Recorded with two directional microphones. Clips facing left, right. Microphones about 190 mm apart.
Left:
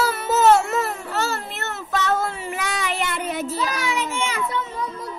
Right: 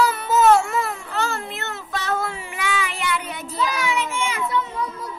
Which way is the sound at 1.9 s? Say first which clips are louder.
Left 3 dB; 40° left (ahead or behind).